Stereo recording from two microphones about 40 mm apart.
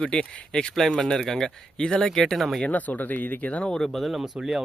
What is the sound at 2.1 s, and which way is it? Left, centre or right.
Speech, centre.